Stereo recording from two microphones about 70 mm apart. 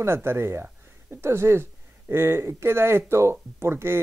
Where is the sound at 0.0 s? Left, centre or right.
Right.